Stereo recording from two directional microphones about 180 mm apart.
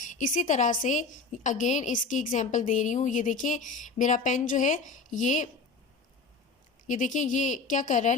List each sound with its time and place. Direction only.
0.0 s a woman's voice: 45° left (ahead or behind)
6.8 s a woman's voice: 45° left (ahead or behind)